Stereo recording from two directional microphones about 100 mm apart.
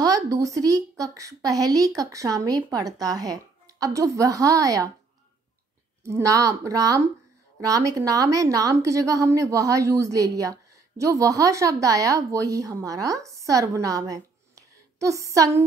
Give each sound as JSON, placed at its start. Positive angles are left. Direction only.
{"t": 0.0, "sound": "a woman's voice", "side_deg": -35}
{"t": 6.0, "sound": "a woman's voice", "side_deg": -30}